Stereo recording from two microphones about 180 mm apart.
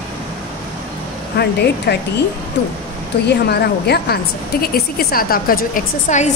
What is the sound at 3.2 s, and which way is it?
A woman's voice, 65° left (ahead or behind).